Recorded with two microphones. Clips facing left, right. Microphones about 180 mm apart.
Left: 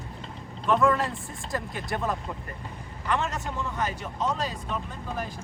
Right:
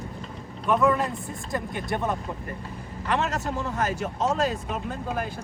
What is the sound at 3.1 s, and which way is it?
Speech, 40° right (ahead or behind).